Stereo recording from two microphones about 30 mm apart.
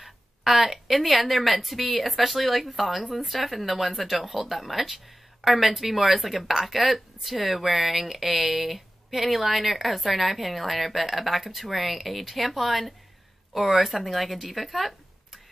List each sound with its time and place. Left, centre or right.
0.0 s speech: centre